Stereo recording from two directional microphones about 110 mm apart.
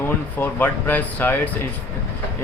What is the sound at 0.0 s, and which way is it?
Speech, 20° left (ahead or behind).